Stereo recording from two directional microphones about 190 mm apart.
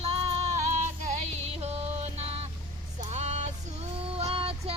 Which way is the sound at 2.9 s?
35° right (ahead or behind).